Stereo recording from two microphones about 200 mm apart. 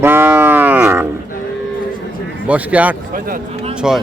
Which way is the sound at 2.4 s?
5° right (ahead or behind).